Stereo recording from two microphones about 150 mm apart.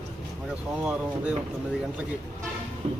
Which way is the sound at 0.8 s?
10° right (ahead or behind).